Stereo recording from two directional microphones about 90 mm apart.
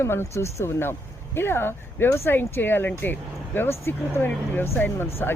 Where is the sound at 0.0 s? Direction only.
30° left (ahead or behind).